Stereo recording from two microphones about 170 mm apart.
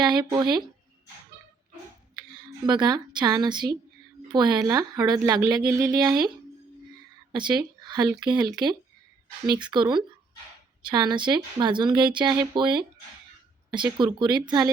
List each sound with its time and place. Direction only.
0.0 s speech: 25° right (ahead or behind)
2.1 s speech: 25° right (ahead or behind)
7.3 s speech: 25° right (ahead or behind)